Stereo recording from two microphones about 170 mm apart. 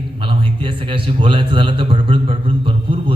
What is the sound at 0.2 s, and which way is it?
A man's voice, 30° right (ahead or behind).